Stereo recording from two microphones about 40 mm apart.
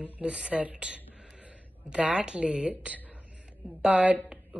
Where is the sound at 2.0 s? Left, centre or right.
Right.